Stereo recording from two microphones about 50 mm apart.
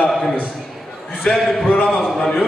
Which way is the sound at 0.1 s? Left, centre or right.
Centre.